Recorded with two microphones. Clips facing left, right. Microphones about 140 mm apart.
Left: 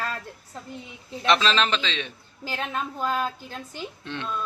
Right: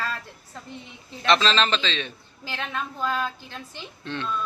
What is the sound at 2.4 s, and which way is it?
A woman's voice, 40° left (ahead or behind).